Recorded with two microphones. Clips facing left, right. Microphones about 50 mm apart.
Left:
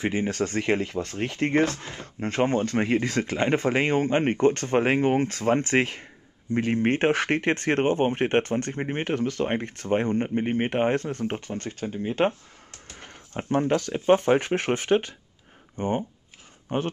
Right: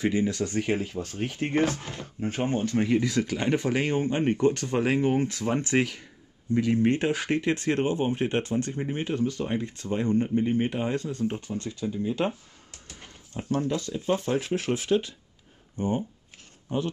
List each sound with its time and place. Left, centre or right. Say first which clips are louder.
0.0 s speech: even; left
12.8 s a sound: left 3 dB; left
13.5 s speech: left 4 dB; left